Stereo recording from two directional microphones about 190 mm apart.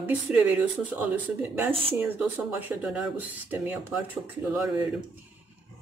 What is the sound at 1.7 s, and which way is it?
Speech, 30° right (ahead or behind).